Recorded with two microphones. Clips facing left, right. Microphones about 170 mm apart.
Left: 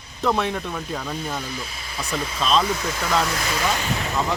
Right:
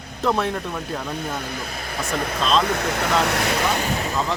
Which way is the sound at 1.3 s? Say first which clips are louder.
Right 2 dB; 55° right (ahead or behind).